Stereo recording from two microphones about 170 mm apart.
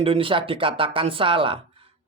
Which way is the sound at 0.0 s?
30° right (ahead or behind).